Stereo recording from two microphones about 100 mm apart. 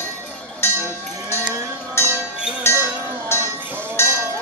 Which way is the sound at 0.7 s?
25° right (ahead or behind).